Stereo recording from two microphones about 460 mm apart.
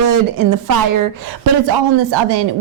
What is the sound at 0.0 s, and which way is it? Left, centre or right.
A woman's voice, right.